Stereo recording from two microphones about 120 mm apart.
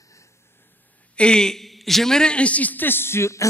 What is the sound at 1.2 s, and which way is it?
A man's voice, 5° left (ahead or behind).